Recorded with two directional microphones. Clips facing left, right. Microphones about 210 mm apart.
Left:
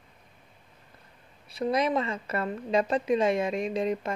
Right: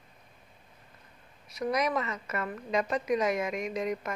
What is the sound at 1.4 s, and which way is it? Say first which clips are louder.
A woman's voice: left 3 dB; 30° left (ahead or behind).